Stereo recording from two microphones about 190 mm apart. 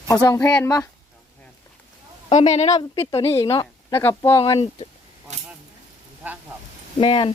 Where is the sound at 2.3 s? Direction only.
35° left (ahead or behind).